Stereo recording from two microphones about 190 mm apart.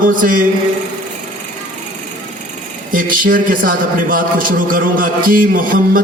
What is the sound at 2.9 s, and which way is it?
A man's voice, 45° right (ahead or behind).